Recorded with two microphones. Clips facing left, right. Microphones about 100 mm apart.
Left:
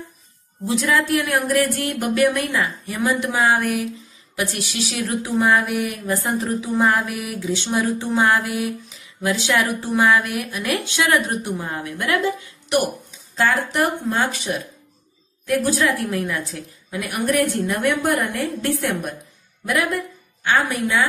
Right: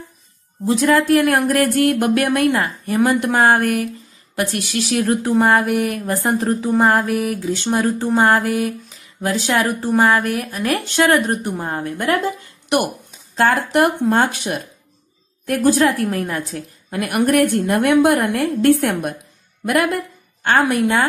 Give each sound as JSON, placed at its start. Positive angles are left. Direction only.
{"t": 0.7, "sound": "speech", "side_deg": -45}
{"t": 13.4, "sound": "a woman's voice", "side_deg": -60}